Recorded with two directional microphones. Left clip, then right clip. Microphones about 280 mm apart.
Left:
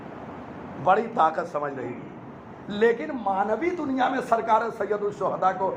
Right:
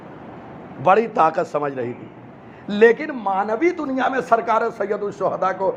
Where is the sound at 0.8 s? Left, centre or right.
Right.